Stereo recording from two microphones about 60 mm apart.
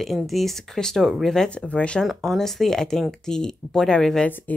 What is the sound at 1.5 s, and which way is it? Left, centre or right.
Speech, left.